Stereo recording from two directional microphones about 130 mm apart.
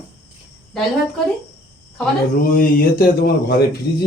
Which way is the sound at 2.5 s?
90° left.